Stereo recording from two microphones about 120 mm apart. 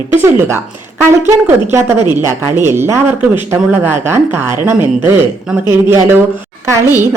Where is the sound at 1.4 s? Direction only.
20° right (ahead or behind).